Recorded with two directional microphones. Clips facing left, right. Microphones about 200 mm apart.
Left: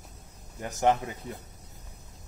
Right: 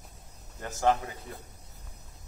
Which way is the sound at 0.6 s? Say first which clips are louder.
Left 1 dB; 20° left (ahead or behind).